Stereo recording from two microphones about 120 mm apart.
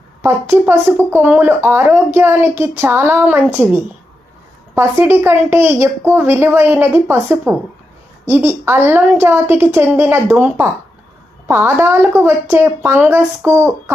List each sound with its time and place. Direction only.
0.2 s a woman's voice: 20° right (ahead or behind)
4.7 s a woman's voice: 20° right (ahead or behind)